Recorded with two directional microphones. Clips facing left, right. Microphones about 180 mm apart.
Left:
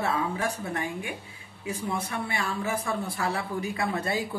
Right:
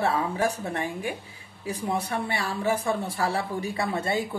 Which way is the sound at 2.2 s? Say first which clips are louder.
Right 4 dB; 35° right (ahead or behind).